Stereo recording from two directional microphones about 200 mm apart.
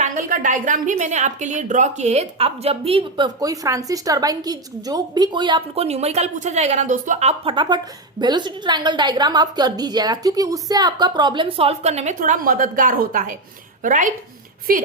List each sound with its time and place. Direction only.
0.0 s a woman's voice: 40° right (ahead or behind)